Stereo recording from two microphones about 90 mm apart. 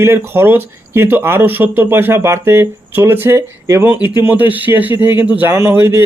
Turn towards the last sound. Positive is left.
turn(degrees=-25)  # may be behind; listen again after turning